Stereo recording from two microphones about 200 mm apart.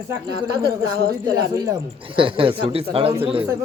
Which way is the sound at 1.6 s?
20° right (ahead or behind).